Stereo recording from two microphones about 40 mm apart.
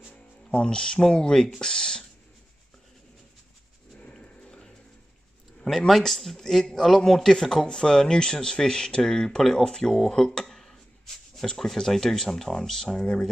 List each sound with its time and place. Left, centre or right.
0.5 s speech: left
1.6 s a sound: centre
4.0 s dog: left
4.5 s music: centre
5.6 s speech: centre
10.5 s a sound: centre
11.4 s speech: centre